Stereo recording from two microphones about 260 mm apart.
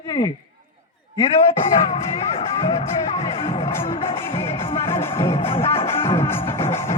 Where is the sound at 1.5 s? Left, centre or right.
Left.